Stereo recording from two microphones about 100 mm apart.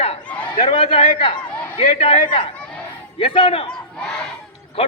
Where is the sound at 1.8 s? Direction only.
85° left.